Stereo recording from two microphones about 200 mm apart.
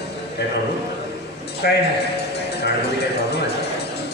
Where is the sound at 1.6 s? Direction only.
50° left (ahead or behind).